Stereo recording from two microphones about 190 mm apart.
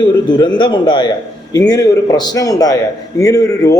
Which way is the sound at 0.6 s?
25° left (ahead or behind).